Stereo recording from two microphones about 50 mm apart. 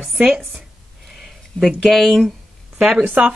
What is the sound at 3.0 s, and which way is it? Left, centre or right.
Speech, right.